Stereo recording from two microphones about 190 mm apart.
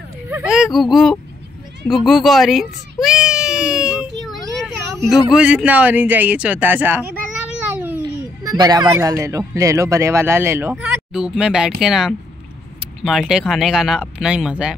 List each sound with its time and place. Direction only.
0.3 s speech: 5° right (ahead or behind)
1.9 s baby cry: centre (ahead or behind)
4.3 s speech: centre (ahead or behind)
8.5 s speech: 20° right (ahead or behind)